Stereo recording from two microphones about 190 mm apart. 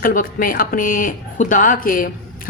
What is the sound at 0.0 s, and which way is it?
A woman's voice, 45° left (ahead or behind).